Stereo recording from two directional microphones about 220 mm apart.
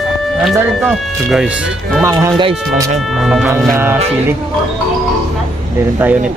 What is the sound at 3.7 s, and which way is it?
Music, 10° right (ahead or behind).